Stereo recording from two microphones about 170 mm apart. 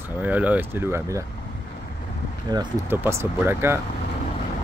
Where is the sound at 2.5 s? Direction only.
20° right (ahead or behind).